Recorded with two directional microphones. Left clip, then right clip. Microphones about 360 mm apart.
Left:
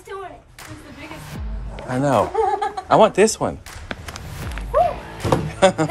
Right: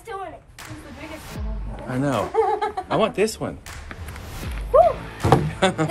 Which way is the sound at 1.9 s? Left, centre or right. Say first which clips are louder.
Left 4 dB; centre.